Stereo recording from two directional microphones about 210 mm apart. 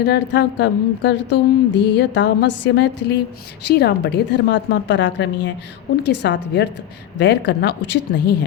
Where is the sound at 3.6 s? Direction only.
50° left (ahead or behind).